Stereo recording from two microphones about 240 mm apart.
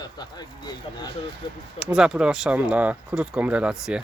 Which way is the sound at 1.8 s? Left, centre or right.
Centre.